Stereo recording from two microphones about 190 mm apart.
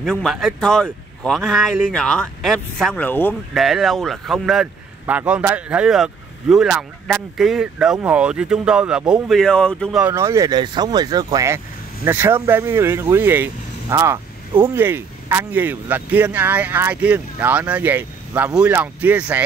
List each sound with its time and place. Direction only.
0.0 s speech: centre (ahead or behind)
3.5 s speech: centre (ahead or behind)
10.1 s speech: 15° right (ahead or behind)